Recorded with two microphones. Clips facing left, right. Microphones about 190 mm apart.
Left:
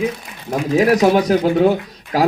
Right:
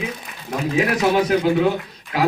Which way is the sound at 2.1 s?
40° left (ahead or behind).